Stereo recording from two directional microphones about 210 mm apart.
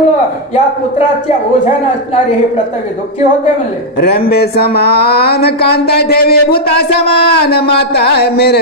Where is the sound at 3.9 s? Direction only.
50° left (ahead or behind).